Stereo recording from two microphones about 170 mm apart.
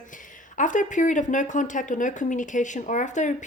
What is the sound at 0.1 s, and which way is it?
Speech, 50° left (ahead or behind).